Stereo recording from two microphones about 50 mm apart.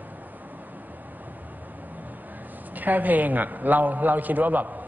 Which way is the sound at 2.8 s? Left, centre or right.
Right.